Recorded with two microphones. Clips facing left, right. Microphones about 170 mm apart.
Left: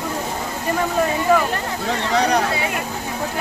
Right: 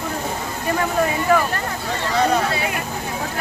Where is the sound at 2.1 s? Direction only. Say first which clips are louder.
Even; 75° left (ahead or behind).